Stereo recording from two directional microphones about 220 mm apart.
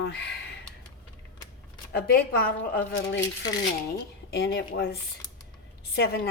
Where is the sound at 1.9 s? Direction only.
45° left (ahead or behind).